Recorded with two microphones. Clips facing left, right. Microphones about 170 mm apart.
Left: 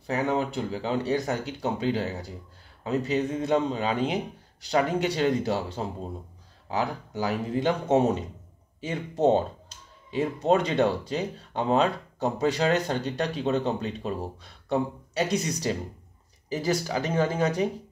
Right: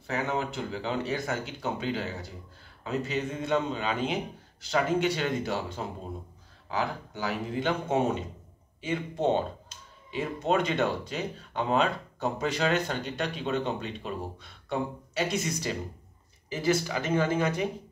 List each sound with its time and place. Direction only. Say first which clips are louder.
0.0 s speech: left 4 dB; 35° left (ahead or behind)
7.2 s speech: left 4 dB; 40° left (ahead or behind)